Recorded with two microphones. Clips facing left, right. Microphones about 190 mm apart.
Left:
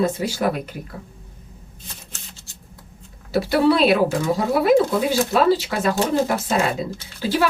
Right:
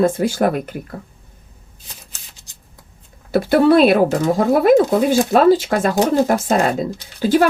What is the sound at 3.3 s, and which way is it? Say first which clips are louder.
Speech: right 5 dB; 50° right (ahead or behind).